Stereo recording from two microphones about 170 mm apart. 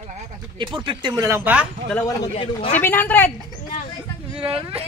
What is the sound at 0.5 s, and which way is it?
Speech, 30° right (ahead or behind).